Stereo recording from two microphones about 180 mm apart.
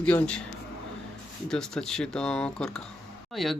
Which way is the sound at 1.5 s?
5° left (ahead or behind).